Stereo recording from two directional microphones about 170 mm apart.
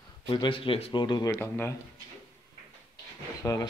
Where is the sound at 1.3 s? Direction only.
10° left (ahead or behind).